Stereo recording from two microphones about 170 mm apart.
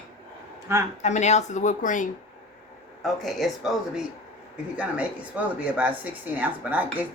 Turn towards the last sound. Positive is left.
turn(degrees=-10)  # may be behind; listen again after turning